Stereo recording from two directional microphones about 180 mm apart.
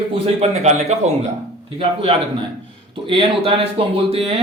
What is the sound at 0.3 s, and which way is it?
Speech, 40° right (ahead or behind).